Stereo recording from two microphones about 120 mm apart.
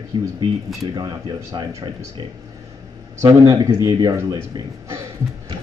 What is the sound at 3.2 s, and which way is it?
A man's voice, 30° right (ahead or behind).